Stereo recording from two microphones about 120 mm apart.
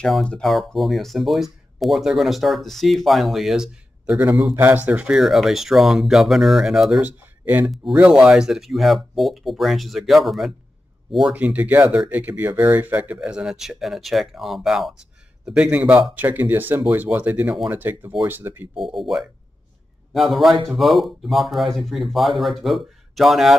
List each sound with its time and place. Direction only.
0.0 s speech: 5° left (ahead or behind)
7.0 s speech: 15° right (ahead or behind)
18.9 s speech: centre (ahead or behind)